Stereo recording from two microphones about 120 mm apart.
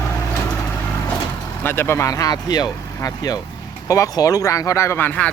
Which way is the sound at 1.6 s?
20° left (ahead or behind).